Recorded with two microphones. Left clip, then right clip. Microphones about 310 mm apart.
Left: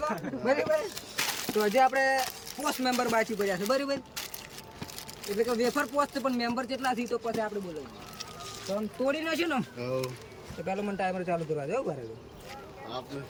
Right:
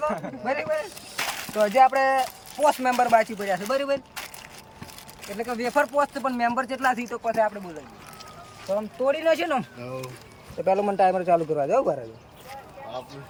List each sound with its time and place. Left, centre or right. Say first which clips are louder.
0.4 s speech: even; centre
5.4 s speech: right 4 dB; centre
8.7 s speech: right 6 dB; centre
9.8 s speech: left 3 dB; centre
10.7 s a man's voice: right 11 dB; centre